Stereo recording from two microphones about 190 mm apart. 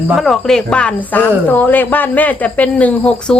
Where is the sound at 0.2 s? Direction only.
Centre (ahead or behind).